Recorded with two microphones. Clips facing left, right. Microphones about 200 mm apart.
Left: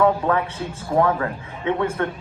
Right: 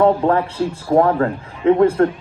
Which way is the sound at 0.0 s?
35° right (ahead or behind).